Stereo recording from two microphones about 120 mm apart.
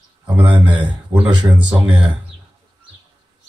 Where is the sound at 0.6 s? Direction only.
10° right (ahead or behind).